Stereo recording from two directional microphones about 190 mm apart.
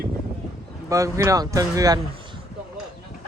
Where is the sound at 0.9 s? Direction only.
15° right (ahead or behind).